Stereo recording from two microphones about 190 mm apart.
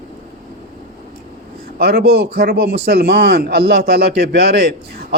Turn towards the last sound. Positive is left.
turn(degrees=-60)  # may be behind; listen again after turning